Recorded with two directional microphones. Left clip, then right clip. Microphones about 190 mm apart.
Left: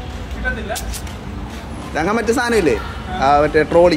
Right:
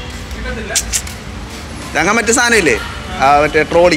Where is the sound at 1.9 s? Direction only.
Centre (ahead or behind).